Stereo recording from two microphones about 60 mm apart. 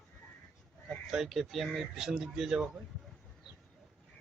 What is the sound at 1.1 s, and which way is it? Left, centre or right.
Speech, centre.